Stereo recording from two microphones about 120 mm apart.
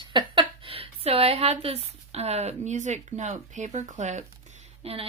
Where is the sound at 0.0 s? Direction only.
40° right (ahead or behind); by 4.2 s 85° right.